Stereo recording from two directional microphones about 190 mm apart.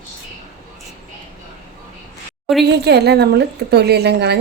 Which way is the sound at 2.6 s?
60° right (ahead or behind).